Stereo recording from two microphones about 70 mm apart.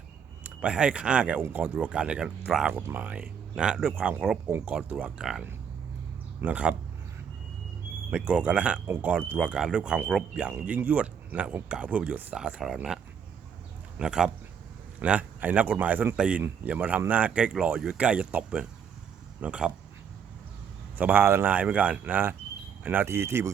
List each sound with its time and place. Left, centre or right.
0.4 s speech: centre
2.9 s speech: right
5.1 s speech: centre
6.4 s speech: centre
8.1 s speech: centre
12.4 s speech: centre
14.0 s speech: centre
21.0 s speech: right
21.5 s speech: centre; by 23.5 s right